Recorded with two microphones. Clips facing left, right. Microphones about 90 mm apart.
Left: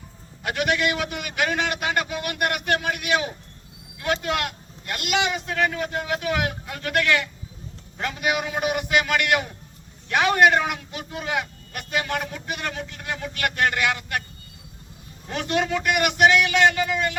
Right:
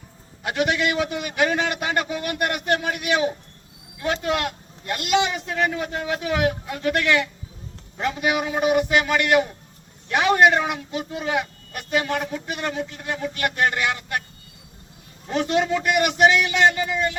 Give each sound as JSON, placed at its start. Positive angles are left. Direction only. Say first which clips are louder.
{"t": 0.4, "sound": "a man's voice", "louder": "right 1 dB", "side_deg": -20}
{"t": 15.3, "sound": "a man's voice", "louder": "right 3 dB", "side_deg": -25}